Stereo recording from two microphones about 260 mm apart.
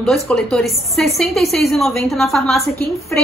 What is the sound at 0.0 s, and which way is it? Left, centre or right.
A woman's voice, centre.